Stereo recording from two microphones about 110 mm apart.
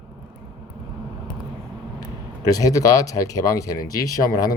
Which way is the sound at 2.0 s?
35° left (ahead or behind).